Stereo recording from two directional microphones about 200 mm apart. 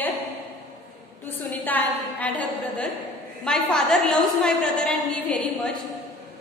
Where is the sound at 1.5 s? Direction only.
10° left (ahead or behind).